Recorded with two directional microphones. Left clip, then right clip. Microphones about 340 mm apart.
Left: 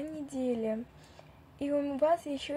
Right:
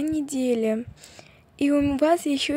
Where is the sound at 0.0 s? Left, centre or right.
Right.